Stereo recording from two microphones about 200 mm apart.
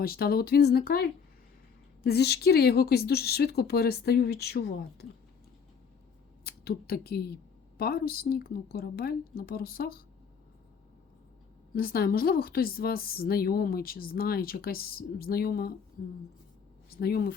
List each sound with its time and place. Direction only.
0.0 s a woman's voice: 50° left (ahead or behind)
6.4 s a woman's voice: 50° left (ahead or behind)
11.7 s a woman's voice: 45° left (ahead or behind)
16.9 s a woman's voice: 50° left (ahead or behind)